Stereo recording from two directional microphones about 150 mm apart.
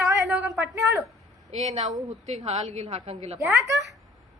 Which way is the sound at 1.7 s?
50° right (ahead or behind).